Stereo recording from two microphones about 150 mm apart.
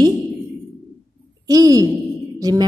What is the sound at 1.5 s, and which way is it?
Speech, 25° right (ahead or behind).